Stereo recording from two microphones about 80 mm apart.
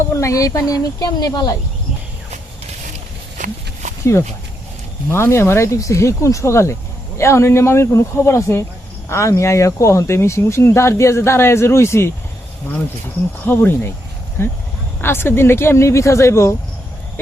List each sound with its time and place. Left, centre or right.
0.1 s speech: left
5.1 s speech: left
13.4 s speech: left